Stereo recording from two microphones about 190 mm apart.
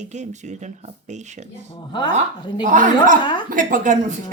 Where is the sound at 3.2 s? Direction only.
25° left (ahead or behind).